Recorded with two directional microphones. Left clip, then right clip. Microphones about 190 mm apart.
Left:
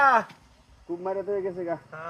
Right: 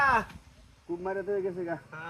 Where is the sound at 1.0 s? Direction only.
5° right (ahead or behind).